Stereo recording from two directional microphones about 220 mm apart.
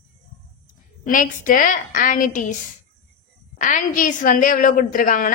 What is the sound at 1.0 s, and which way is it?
A woman's voice, 40° left (ahead or behind).